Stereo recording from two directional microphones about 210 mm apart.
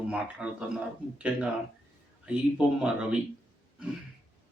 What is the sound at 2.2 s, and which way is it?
Speech, 5° right (ahead or behind).